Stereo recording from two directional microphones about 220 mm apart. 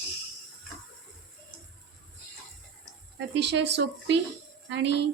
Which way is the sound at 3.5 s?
50° right (ahead or behind).